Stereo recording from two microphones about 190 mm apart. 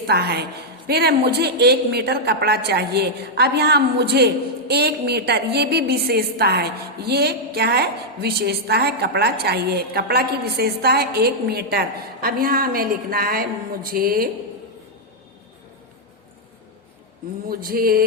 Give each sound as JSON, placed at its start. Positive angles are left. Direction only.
{"t": 0.1, "sound": "a woman's voice", "side_deg": -55}
{"t": 17.5, "sound": "mantra", "side_deg": -50}